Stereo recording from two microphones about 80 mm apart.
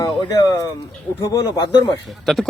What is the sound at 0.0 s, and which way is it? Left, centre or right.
Speech, left.